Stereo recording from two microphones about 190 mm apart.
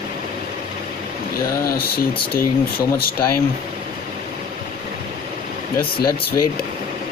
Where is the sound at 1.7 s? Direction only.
50° left (ahead or behind).